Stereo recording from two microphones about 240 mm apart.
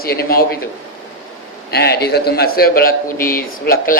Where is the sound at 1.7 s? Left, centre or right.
Left.